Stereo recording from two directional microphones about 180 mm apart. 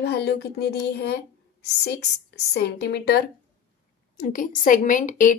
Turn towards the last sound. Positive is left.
turn(degrees=45)  # may be behind; listen again after turning